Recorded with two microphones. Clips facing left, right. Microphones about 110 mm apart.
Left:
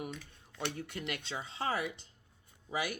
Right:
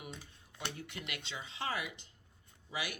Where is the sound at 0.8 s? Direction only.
40° left (ahead or behind).